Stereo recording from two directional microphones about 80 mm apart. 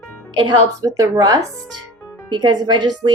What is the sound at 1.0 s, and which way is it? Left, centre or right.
Speech, right.